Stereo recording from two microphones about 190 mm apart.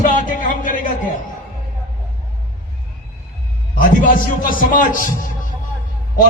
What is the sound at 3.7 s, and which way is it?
A man's voice, 45° left (ahead or behind).